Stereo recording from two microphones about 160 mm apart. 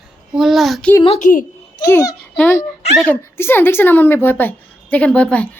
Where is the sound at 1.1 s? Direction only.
50° left (ahead or behind).